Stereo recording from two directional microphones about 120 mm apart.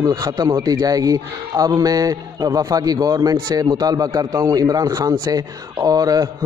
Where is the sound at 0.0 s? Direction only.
30° right (ahead or behind).